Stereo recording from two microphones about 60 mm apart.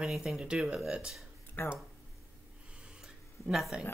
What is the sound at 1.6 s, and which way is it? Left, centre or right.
Speech, left.